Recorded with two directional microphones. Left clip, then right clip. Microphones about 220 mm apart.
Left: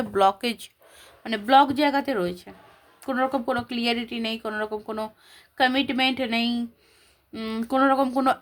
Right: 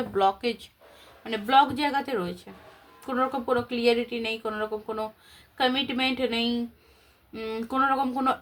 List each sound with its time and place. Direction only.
0.1 s speech: 50° left (ahead or behind)